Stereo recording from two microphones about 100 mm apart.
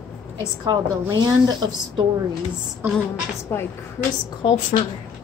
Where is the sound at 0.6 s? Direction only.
45° right (ahead or behind).